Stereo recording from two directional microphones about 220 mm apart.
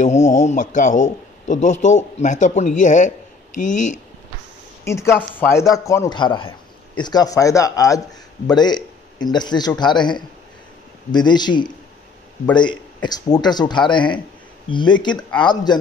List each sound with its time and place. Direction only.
0.0 s a man's voice: 35° left (ahead or behind)
4.8 s a man's voice: 10° left (ahead or behind)